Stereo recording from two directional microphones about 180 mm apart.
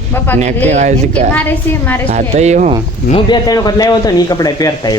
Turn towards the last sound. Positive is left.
turn(degrees=20)  # may be behind; listen again after turning